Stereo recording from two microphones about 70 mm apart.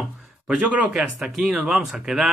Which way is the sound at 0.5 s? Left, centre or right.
Centre.